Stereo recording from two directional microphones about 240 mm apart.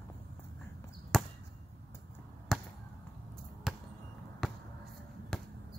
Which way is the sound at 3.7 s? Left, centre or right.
Centre.